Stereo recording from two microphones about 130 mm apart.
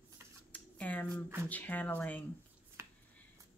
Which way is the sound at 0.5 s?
10° left (ahead or behind).